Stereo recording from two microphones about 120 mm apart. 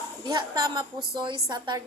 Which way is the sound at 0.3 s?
30° right (ahead or behind).